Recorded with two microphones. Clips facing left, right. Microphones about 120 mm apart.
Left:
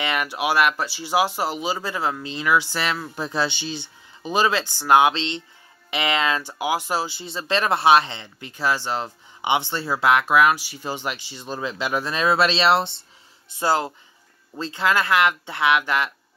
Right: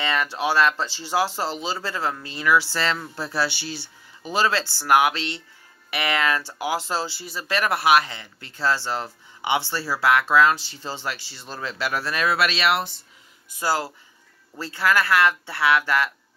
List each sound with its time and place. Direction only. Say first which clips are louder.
0.0 s speech: even; 15° left (ahead or behind)